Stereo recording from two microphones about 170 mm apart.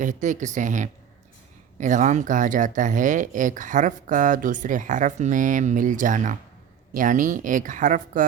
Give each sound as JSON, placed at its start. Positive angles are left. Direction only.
{"t": 0.0, "sound": "speech", "side_deg": -45}